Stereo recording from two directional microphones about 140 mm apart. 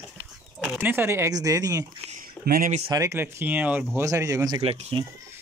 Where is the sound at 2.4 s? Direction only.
85° right.